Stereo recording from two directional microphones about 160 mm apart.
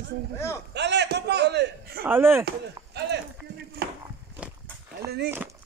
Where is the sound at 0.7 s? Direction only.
90° right.